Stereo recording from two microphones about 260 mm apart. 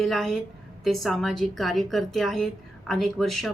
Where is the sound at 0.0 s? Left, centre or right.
Centre.